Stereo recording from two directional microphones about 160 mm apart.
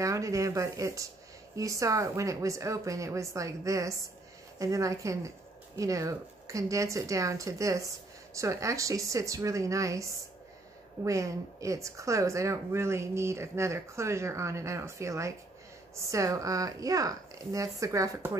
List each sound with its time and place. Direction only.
0.0 s a woman's voice: 20° right (ahead or behind)